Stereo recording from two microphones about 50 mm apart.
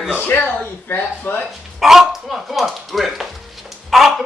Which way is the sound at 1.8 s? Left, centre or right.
Centre.